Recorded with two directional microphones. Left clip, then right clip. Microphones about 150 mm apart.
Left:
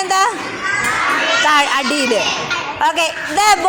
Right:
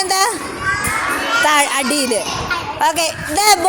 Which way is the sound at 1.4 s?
25° right (ahead or behind).